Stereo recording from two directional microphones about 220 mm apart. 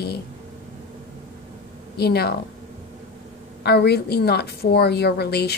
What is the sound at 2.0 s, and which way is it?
Speech, 45° left (ahead or behind).